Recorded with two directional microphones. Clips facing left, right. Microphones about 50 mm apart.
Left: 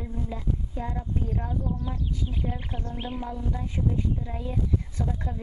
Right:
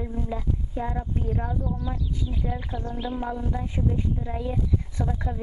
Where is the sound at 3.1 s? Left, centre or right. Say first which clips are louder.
Right 3 dB; centre.